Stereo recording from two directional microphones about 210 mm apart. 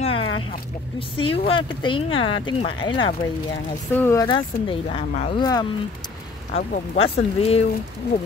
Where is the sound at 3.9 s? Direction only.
10° left (ahead or behind).